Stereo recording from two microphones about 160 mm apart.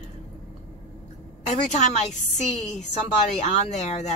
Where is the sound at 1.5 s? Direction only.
45° left (ahead or behind).